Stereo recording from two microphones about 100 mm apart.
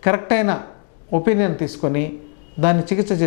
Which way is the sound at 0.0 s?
15° left (ahead or behind).